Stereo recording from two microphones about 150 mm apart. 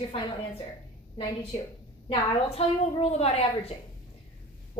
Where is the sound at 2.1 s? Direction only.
40° left (ahead or behind).